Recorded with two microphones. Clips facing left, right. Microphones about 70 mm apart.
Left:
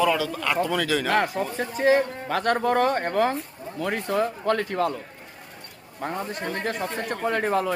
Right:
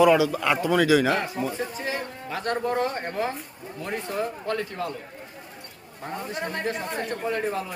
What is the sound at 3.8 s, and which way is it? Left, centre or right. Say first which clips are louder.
Speech: left 4 dB; left.